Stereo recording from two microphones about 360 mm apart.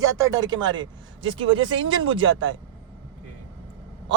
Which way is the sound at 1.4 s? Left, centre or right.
Right.